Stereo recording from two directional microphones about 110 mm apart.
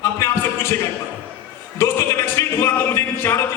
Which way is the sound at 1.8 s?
25° left (ahead or behind).